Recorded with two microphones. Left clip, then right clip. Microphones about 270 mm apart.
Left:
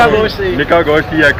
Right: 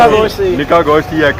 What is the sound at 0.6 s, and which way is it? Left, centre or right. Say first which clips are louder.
Speech: even; centre.